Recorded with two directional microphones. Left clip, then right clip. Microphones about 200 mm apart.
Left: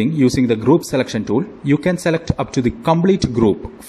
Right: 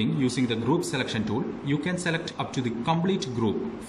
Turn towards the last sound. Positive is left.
turn(degrees=30)  # may be behind; listen again after turning